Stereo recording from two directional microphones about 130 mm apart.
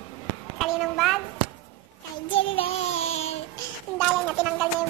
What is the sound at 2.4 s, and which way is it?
Child singing, 50° left (ahead or behind).